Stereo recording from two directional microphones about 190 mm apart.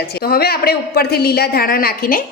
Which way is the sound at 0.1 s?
55° left (ahead or behind).